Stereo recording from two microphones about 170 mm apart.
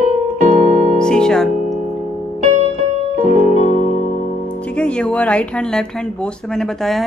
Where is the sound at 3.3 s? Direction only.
40° left (ahead or behind).